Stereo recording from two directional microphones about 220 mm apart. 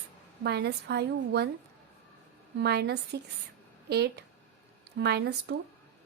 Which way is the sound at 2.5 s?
50° right (ahead or behind).